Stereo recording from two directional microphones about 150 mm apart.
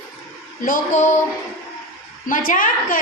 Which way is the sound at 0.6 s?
65° left (ahead or behind).